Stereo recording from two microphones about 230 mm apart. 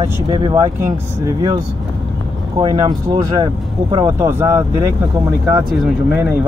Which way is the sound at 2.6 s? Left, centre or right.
Centre.